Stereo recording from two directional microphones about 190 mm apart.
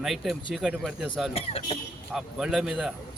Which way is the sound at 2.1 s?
5° right (ahead or behind).